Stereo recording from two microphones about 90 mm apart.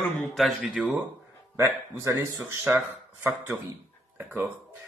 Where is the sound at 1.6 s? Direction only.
30° right (ahead or behind).